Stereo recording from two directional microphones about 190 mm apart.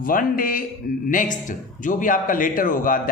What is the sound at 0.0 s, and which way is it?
Speech, 50° left (ahead or behind).